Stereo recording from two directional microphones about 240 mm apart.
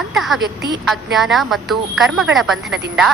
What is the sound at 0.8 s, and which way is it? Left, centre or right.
Speech, centre.